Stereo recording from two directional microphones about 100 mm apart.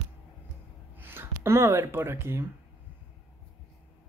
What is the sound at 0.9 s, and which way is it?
Speech, 20° right (ahead or behind).